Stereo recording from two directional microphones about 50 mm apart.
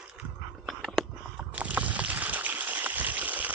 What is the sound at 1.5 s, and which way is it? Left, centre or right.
Boat, right.